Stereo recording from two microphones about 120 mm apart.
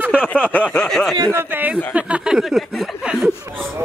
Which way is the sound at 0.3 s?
15° left (ahead or behind).